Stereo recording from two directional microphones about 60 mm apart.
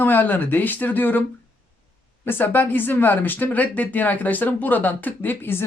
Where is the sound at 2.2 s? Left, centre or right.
Left.